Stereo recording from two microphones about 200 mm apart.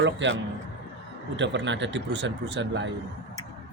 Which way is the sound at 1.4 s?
65° right (ahead or behind).